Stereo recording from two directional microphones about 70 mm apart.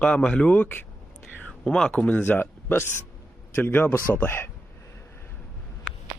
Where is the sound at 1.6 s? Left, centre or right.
Centre; by 4.5 s left.